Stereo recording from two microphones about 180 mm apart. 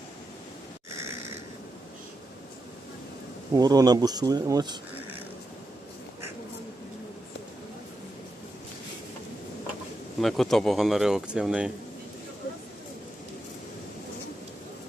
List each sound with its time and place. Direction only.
0.9 s a sound: 15° right (ahead or behind)
3.5 s speech: 20° right (ahead or behind)
10.2 s speech: centre (ahead or behind)